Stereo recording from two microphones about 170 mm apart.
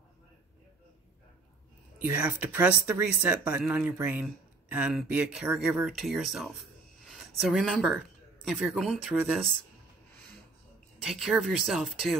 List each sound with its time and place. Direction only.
2.0 s speech: 10° right (ahead or behind)
11.0 s speech: 5° right (ahead or behind)